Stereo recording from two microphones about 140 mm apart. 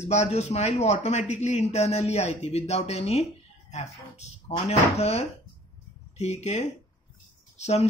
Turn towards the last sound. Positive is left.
turn(degrees=50)  # may be behind; listen again after turning